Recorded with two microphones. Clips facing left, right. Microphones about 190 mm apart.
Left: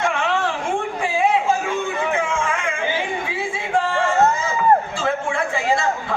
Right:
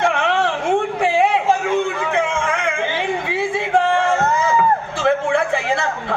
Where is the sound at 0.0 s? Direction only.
60° right (ahead or behind).